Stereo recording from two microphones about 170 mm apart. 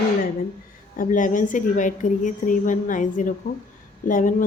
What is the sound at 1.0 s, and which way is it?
A woman's voice, 50° left (ahead or behind).